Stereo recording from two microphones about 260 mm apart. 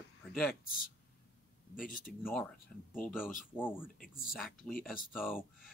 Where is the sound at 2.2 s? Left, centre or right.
Centre.